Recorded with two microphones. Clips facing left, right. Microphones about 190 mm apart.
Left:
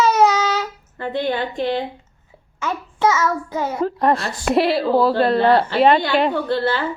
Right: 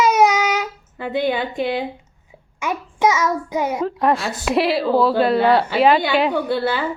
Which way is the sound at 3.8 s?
Centre (ahead or behind).